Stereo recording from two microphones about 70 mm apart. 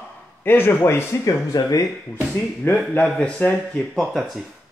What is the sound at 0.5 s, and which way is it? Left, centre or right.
Speech, left.